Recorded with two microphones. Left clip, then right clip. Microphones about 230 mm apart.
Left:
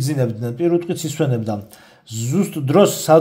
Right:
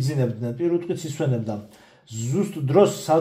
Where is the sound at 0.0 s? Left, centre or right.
Left.